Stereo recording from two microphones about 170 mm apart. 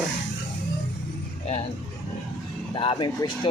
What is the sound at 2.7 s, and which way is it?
Speech, 30° left (ahead or behind).